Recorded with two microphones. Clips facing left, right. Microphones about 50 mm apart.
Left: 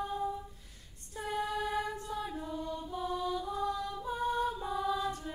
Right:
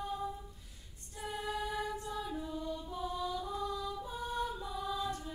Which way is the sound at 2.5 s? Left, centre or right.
Left.